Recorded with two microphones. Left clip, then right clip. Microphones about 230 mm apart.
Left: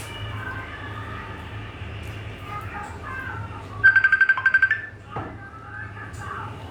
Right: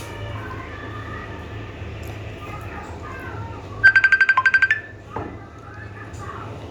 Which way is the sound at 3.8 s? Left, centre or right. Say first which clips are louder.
Right 2 dB; right.